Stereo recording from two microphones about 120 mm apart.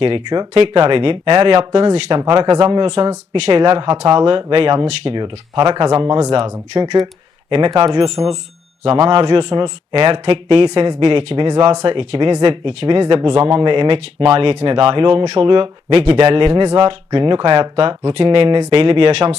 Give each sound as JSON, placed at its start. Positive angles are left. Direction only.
{"t": 0.3, "sound": "speech", "side_deg": -45}
{"t": 2.8, "sound": "speech", "side_deg": -60}
{"t": 7.7, "sound": "speech", "side_deg": -35}